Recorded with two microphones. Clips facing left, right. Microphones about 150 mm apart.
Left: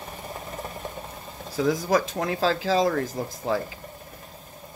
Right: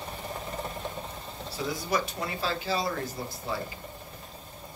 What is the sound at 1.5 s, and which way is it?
Speech, 90° left.